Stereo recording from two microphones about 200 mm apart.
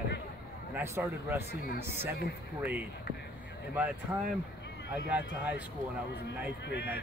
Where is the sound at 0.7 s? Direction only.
10° right (ahead or behind).